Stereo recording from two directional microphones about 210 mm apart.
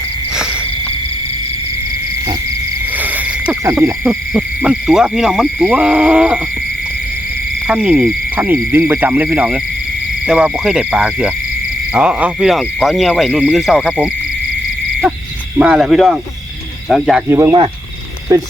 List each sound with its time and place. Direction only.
3.0 s owl: 5° right (ahead or behind)
7.7 s speech: 5° right (ahead or behind)
10.2 s owl: 5° right (ahead or behind)
15.5 s owl: 5° right (ahead or behind)
17.2 s speech: 10° right (ahead or behind)